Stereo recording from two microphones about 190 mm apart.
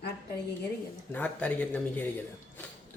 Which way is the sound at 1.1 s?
5° left (ahead or behind).